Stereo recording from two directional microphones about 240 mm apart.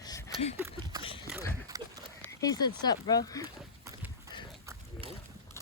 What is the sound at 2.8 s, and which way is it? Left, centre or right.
Speech, centre.